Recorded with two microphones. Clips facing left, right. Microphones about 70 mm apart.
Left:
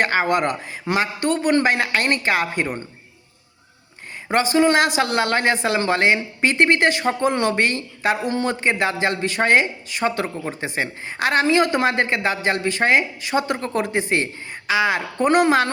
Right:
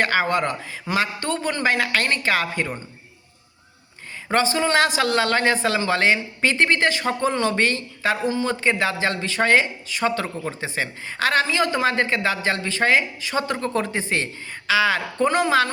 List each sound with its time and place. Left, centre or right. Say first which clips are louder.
0.0 s speech: left 2 dB; left
4.5 s speech: left 7 dB; left